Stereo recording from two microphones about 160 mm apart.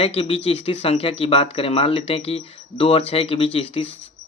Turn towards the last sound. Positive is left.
turn(degrees=35)  # may be behind; listen again after turning